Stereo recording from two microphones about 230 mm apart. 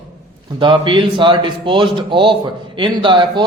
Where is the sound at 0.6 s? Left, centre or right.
Right.